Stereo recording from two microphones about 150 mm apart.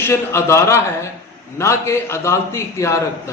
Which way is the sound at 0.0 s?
15° left (ahead or behind).